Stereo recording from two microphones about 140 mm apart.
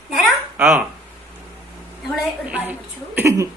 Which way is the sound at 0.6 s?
10° right (ahead or behind).